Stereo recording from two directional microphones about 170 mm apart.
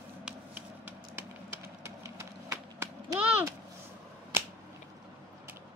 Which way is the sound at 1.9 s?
15° right (ahead or behind).